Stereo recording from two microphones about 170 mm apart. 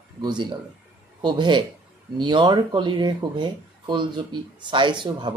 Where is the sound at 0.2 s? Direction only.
25° right (ahead or behind).